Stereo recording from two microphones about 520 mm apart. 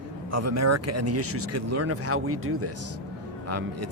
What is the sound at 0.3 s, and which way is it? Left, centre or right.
Speech, right.